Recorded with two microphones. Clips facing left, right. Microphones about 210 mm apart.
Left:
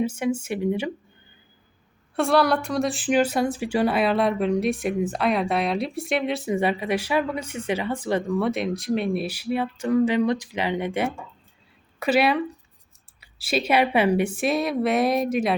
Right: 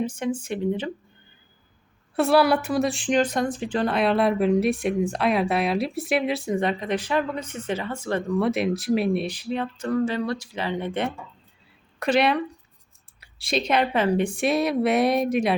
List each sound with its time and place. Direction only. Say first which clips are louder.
0.0 s speech: left 2 dB; 10° left (ahead or behind)
2.1 s a woman's voice: right 1 dB; 5° right (ahead or behind); by 8.4 s 15° left (ahead or behind)
8.4 s a woman's voice: right 2 dB; centre (ahead or behind)